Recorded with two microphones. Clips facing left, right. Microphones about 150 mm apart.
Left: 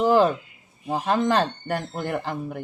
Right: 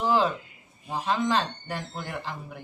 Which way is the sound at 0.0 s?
50° left (ahead or behind).